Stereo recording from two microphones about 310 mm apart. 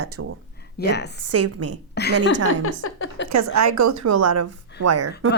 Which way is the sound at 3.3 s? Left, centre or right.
Right.